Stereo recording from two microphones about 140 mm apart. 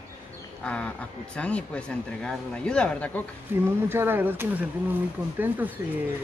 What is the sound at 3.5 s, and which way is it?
Speech, 15° right (ahead or behind).